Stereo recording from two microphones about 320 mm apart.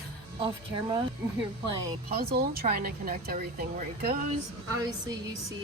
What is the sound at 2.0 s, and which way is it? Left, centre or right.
A woman's voice, right.